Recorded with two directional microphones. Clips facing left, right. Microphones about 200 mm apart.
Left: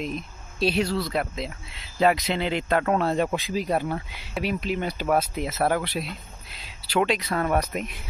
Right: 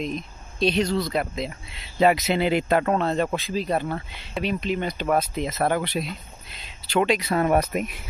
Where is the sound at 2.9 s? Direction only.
10° left (ahead or behind).